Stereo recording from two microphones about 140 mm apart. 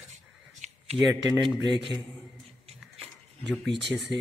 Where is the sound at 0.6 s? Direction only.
55° right (ahead or behind).